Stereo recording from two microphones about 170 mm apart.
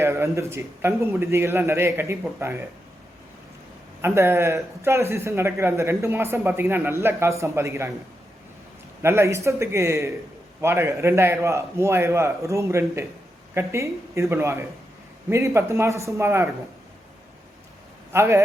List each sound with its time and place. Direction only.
0.0 s speech: 15° right (ahead or behind)
4.0 s speech: 15° right (ahead or behind)
9.0 s speech: 15° right (ahead or behind)
18.1 s speech: 15° right (ahead or behind)